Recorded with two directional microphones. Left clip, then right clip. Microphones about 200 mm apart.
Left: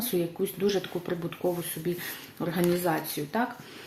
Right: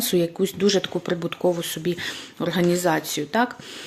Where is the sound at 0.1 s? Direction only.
40° right (ahead or behind).